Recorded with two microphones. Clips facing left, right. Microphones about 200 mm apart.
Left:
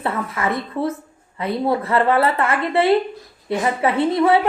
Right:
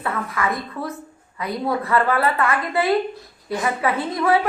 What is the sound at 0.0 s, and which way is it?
A woman's voice, 25° left (ahead or behind).